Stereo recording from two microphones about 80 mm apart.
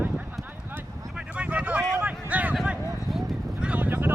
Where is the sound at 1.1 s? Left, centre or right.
Centre.